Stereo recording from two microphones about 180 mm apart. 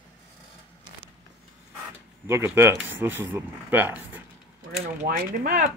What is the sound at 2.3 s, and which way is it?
Speech, 15° right (ahead or behind).